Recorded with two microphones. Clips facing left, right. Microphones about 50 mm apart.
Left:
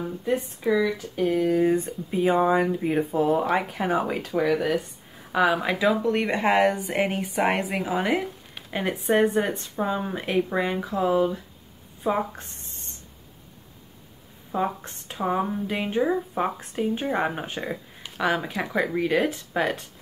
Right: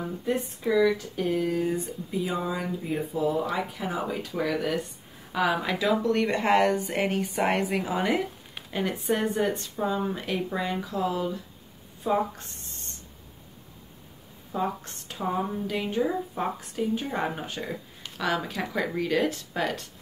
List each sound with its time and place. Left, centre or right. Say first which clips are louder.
0.2 s speech: left 3 dB; centre
1.6 s speech: left 6 dB; left
4.4 s speech: left 5 dB; centre
14.5 s speech: left 3 dB; left
18.0 s a sound: left 5 dB; centre
18.3 s speech: left 3 dB; centre